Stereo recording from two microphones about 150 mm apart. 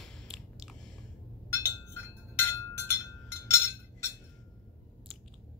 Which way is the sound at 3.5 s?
15° left (ahead or behind).